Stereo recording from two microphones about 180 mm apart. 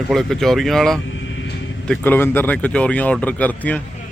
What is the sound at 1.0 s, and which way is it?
Vehicle, 90° left.